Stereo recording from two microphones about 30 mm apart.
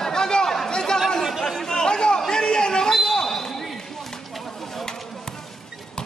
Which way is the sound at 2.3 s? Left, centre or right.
Left.